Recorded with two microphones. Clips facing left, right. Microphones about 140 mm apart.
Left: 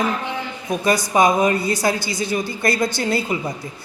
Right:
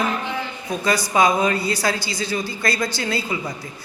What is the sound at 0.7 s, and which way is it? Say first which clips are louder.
A man's voice: left 3 dB; 20° left (ahead or behind).